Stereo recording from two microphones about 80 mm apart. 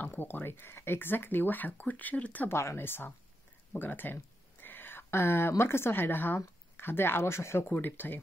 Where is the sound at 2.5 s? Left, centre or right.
Left.